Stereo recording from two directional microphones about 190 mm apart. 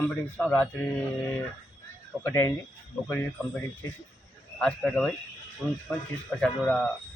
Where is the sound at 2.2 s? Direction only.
10° left (ahead or behind).